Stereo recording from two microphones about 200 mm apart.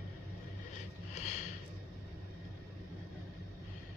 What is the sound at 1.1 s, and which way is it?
Snort, 35° left (ahead or behind).